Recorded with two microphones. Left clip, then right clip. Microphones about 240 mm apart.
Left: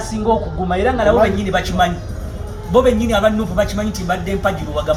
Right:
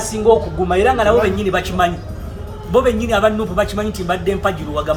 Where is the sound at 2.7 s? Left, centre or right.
Right.